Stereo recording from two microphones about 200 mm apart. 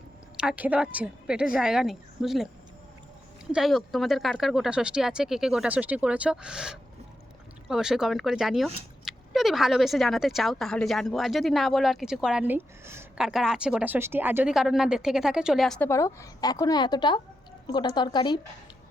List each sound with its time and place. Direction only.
0.3 s speech: 5° right (ahead or behind)
3.5 s speech: centre (ahead or behind)
15.9 s a woman's voice: 15° left (ahead or behind)